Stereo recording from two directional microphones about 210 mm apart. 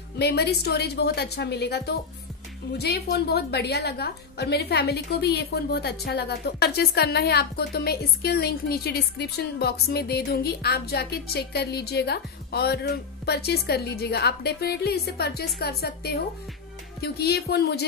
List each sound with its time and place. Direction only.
0.2 s a woman's voice: 50° left (ahead or behind)